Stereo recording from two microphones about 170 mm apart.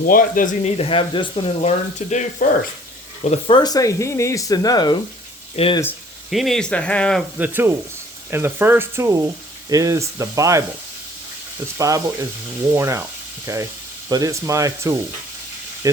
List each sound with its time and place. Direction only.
0.0 s speech: 55° left (ahead or behind); by 1.7 s 30° left (ahead or behind)
2.0 s frying: 45° left (ahead or behind)
3.2 s speech: 35° left (ahead or behind)
6.3 s speech: centre (ahead or behind)
7.3 s speech: 10° right (ahead or behind)
11.8 s speech: 20° right (ahead or behind)